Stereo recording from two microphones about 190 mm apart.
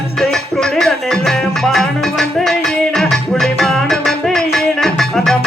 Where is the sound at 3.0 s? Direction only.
Centre (ahead or behind).